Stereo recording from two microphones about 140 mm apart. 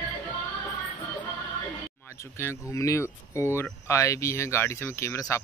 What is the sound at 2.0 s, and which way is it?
Speech, 20° left (ahead or behind).